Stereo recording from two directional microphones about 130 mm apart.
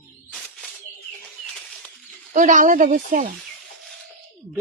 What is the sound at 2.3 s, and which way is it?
Speech, 75° right (ahead or behind).